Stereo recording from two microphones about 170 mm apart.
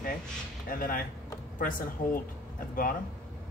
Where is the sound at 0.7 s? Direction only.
55° left (ahead or behind).